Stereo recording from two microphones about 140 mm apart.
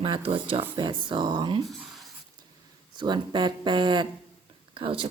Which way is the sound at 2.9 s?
30° right (ahead or behind).